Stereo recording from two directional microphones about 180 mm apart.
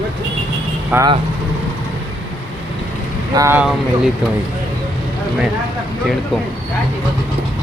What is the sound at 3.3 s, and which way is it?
Speech, 20° right (ahead or behind).